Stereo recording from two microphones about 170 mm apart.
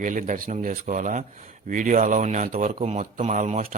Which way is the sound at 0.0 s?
50° right (ahead or behind).